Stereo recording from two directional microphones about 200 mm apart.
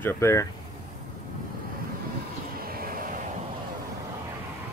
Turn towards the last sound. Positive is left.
turn(degrees=-45)  # may be behind; listen again after turning